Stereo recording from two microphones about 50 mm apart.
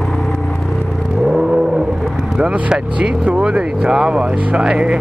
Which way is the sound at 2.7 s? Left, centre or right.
Right.